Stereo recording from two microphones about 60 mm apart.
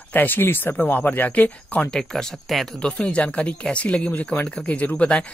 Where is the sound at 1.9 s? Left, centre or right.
Centre.